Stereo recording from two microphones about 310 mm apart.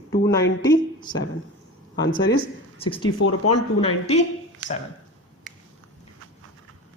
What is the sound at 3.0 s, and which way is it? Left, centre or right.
Speech, left.